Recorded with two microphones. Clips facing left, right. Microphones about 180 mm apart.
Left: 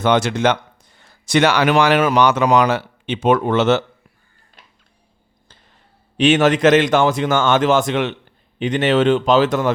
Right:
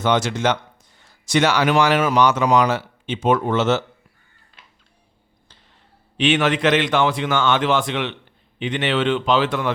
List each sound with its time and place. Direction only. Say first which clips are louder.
0.0 s speech: left 3 dB; 60° left (ahead or behind)
6.1 s a man's voice: left 5 dB; 45° left (ahead or behind)